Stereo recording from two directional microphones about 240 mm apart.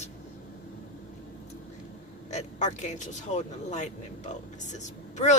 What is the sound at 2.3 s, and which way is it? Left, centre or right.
Speech, left.